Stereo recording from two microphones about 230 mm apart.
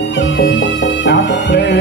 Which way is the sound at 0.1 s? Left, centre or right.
Left.